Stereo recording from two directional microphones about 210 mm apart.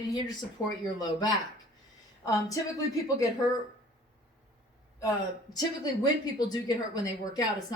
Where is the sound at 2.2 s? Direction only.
15° left (ahead or behind).